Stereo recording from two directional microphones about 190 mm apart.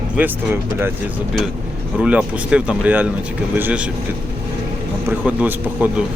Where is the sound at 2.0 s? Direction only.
5° right (ahead or behind).